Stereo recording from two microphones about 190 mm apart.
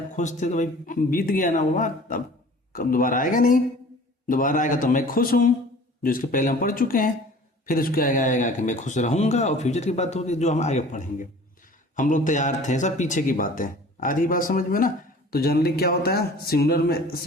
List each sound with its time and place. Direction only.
0.2 s a man's voice: 40° left (ahead or behind)